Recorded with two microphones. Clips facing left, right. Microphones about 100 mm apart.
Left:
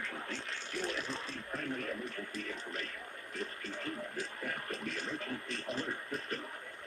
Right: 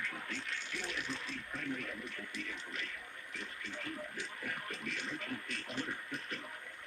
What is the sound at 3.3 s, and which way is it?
Television, 35° left (ahead or behind).